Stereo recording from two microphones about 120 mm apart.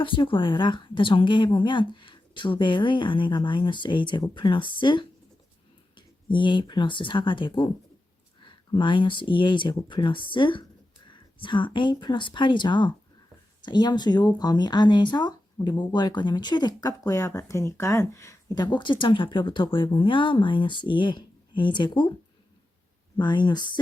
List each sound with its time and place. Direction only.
0.0 s speech: 45° left (ahead or behind)
6.3 s speech: 40° left (ahead or behind)
23.1 s speech: 35° left (ahead or behind)